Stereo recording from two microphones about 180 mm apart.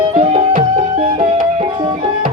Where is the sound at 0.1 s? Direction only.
35° right (ahead or behind).